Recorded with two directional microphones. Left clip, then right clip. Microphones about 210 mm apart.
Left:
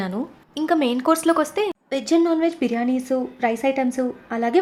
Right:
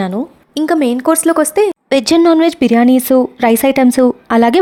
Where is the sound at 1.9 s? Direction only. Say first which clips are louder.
Right 9 dB; 45° right (ahead or behind).